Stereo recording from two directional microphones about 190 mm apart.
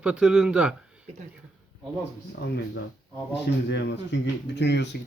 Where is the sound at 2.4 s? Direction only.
55° left (ahead or behind).